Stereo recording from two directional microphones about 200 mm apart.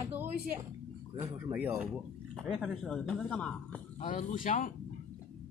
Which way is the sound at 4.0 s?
40° left (ahead or behind).